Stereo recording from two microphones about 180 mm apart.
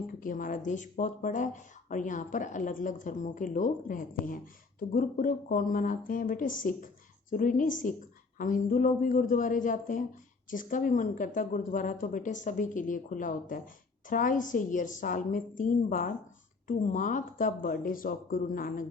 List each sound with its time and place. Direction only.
0.1 s speech: 50° left (ahead or behind)